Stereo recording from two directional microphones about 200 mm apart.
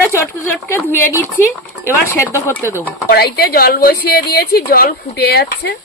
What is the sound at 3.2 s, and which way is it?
A woman's voice, 50° left (ahead or behind).